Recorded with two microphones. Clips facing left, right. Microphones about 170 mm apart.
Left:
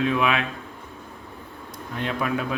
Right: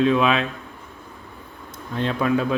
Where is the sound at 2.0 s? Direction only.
30° right (ahead or behind).